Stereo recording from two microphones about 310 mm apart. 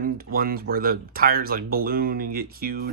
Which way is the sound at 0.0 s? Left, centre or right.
Right.